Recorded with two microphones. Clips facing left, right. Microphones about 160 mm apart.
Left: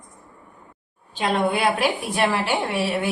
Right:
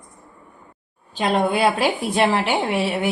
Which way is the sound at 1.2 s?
30° right (ahead or behind).